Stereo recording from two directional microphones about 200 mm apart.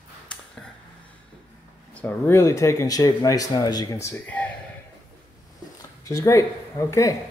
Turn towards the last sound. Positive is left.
turn(degrees=15)  # may be behind; listen again after turning